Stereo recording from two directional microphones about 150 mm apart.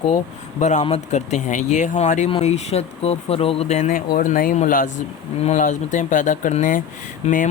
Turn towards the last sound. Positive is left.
turn(degrees=55)  # may be behind; listen again after turning